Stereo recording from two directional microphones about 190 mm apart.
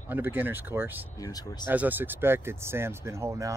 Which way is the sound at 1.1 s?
20° left (ahead or behind).